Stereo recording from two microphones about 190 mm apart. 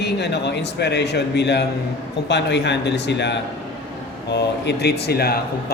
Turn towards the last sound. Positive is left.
turn(degrees=55)  # may be behind; listen again after turning